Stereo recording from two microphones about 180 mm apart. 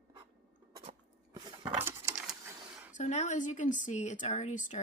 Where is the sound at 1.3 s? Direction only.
15° right (ahead or behind).